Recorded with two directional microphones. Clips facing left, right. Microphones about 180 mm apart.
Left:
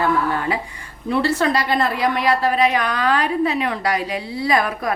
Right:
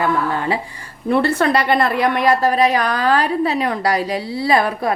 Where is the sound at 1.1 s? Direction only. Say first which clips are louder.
Right 3 dB; 55° right (ahead or behind); by 4.9 s 30° right (ahead or behind).